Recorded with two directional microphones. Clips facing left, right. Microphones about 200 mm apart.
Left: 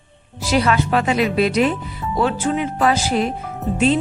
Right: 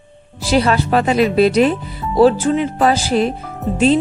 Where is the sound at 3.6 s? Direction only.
Centre (ahead or behind).